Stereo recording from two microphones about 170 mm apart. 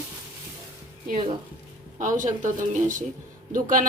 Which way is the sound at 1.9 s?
50° right (ahead or behind).